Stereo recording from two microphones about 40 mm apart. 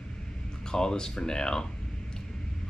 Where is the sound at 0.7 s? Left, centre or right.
Centre.